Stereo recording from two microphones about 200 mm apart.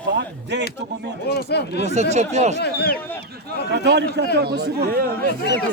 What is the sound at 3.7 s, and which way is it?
A man's voice, 60° right (ahead or behind).